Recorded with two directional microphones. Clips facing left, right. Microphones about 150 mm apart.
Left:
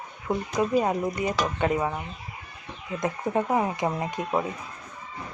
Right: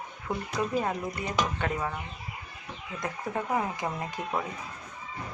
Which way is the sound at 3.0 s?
20° left (ahead or behind).